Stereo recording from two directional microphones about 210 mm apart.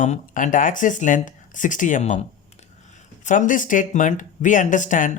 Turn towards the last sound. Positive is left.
turn(degrees=40)  # may be behind; listen again after turning